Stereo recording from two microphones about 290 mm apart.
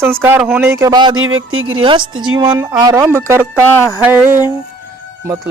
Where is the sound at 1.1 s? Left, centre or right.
Right.